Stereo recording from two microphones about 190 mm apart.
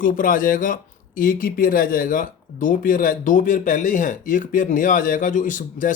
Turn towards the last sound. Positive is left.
turn(degrees=45)  # may be behind; listen again after turning